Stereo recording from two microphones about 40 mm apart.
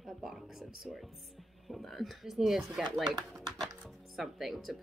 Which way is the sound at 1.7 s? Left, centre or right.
Centre.